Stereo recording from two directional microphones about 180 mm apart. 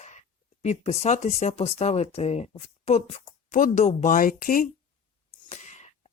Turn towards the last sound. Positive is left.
turn(degrees=40)  # may be behind; listen again after turning